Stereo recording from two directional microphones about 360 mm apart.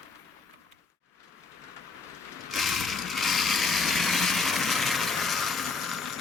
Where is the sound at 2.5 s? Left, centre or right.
Centre.